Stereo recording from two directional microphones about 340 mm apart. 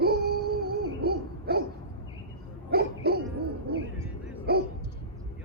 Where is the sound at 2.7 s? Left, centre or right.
Right.